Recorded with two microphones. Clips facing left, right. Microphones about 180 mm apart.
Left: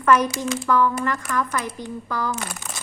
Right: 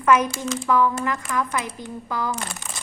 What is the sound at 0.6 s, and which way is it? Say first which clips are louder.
Speech: even; 15° right (ahead or behind).